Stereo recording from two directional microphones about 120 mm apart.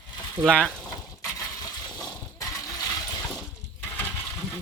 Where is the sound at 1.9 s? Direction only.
30° left (ahead or behind).